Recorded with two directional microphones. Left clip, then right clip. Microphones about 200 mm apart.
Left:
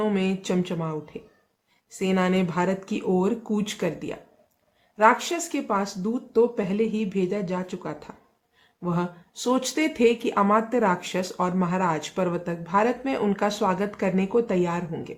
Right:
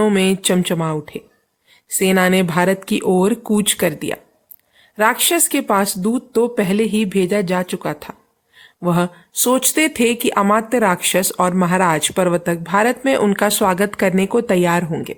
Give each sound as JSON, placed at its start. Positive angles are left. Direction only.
{"t": 0.0, "sound": "speech", "side_deg": -40}